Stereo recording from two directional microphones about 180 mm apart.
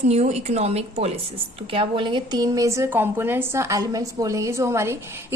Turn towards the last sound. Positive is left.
turn(degrees=-15)  # may be behind; listen again after turning